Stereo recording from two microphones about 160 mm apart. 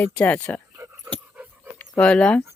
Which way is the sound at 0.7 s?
15° right (ahead or behind).